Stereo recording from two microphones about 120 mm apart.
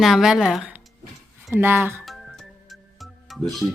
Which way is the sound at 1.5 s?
20° right (ahead or behind).